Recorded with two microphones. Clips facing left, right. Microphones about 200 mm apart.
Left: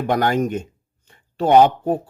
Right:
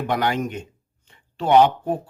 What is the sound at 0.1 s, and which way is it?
A man's voice, 45° left (ahead or behind).